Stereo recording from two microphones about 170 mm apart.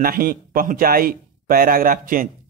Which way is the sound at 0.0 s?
55° right (ahead or behind).